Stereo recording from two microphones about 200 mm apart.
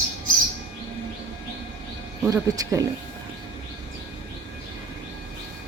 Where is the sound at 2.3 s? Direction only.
15° right (ahead or behind).